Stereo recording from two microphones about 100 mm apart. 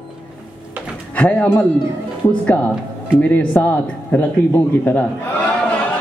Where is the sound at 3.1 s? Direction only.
15° left (ahead or behind).